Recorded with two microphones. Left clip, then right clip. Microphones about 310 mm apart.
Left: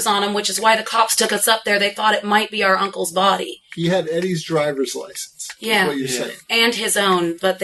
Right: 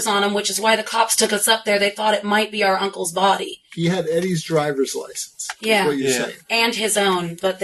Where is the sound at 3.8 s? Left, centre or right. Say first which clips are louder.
Left 1 dB; centre.